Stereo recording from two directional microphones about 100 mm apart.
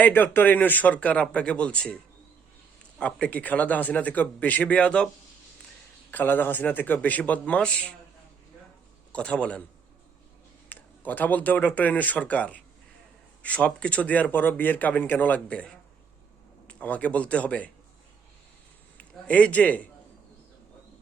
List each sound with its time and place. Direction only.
0.0 s a man's voice: 20° left (ahead or behind)
3.0 s a man's voice: 10° left (ahead or behind)
6.1 s a man's voice: 20° left (ahead or behind)
9.1 s a man's voice: 15° left (ahead or behind)
10.7 s a man's voice: 20° left (ahead or behind)
18.9 s a man's voice: 15° left (ahead or behind)